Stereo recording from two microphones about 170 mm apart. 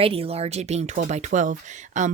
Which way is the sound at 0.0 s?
35° right (ahead or behind).